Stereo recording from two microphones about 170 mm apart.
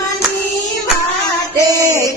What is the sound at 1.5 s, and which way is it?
Music, 20° right (ahead or behind).